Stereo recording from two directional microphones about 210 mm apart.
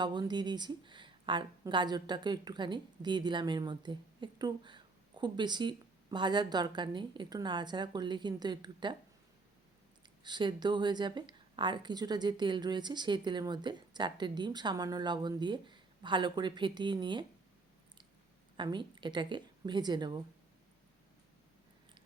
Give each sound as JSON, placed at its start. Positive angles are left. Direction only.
{"t": 0.0, "sound": "speech", "side_deg": -20}
{"t": 10.2, "sound": "speech", "side_deg": -20}
{"t": 18.5, "sound": "a woman's voice", "side_deg": -20}